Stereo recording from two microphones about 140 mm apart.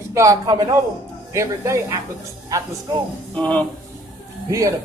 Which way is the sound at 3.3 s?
10° left (ahead or behind).